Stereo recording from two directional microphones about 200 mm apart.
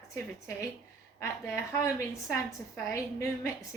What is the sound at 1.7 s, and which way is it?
A woman's voice, 15° left (ahead or behind).